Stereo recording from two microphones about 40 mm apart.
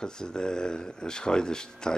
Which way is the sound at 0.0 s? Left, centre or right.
Centre.